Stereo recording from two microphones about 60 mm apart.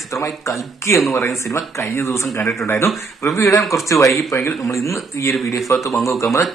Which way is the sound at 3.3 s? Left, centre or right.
Left.